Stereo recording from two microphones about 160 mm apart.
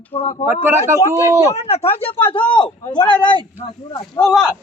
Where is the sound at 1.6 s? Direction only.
40° left (ahead or behind).